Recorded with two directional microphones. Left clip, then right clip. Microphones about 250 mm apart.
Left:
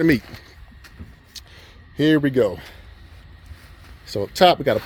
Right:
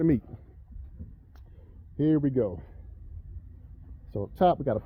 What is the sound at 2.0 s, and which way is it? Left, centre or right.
Speech, centre.